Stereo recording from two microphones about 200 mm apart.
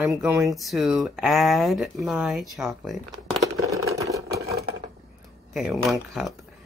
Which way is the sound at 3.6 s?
15° right (ahead or behind).